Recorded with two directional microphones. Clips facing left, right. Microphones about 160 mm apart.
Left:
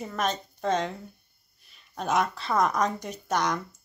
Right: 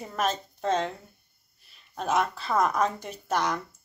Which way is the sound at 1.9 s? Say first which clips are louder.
Even; 5° right (ahead or behind).